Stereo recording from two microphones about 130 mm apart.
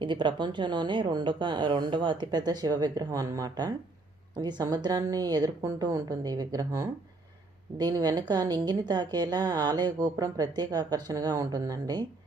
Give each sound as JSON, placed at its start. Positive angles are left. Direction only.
{"t": 0.0, "sound": "a woman's voice", "side_deg": -40}